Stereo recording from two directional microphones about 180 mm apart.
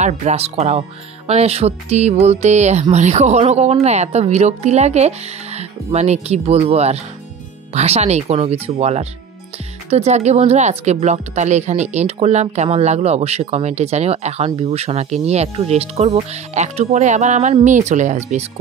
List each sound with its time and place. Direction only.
0.0 s speech: 40° right (ahead or behind)